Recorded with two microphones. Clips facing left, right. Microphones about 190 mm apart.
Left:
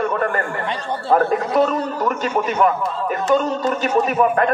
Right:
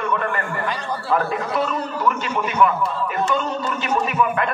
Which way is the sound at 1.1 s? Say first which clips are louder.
Left 6 dB; 40° left (ahead or behind).